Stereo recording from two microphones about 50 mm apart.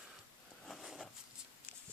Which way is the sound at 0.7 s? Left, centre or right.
Centre.